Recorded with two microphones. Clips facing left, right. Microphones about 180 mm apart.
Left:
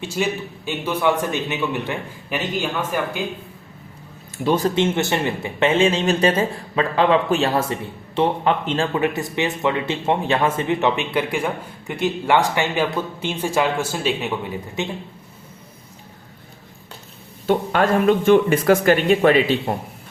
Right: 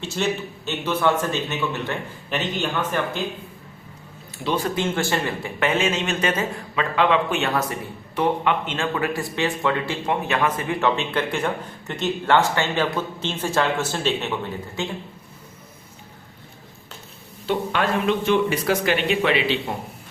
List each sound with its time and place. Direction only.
0.0 s a man's voice: 10° left (ahead or behind)
4.4 s speech: 40° left (ahead or behind)
4.7 s speech: 20° left (ahead or behind)
17.4 s speech: 45° left (ahead or behind)